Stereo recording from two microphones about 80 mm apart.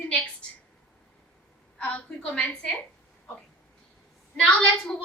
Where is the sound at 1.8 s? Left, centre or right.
Centre.